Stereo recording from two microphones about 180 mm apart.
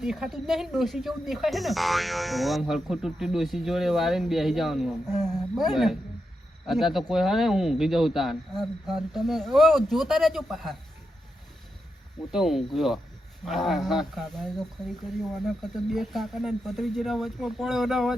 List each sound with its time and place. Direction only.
0.0 s speech: centre (ahead or behind)
12.3 s speech: centre (ahead or behind)